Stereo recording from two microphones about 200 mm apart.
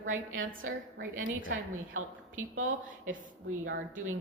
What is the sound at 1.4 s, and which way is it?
Speech, 90° right.